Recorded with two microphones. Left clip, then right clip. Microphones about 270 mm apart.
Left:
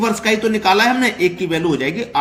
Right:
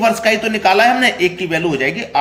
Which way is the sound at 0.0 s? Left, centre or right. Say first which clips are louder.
Right 3 dB; centre.